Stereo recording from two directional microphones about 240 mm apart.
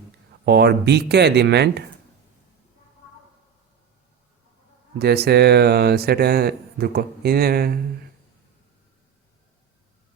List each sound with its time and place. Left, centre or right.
0.4 s speech: right
4.9 s speech: right